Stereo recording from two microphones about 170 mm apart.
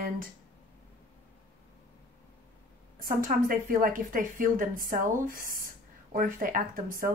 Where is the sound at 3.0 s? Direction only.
55° right (ahead or behind).